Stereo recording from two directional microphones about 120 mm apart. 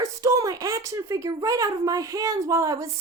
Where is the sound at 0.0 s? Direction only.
25° right (ahead or behind).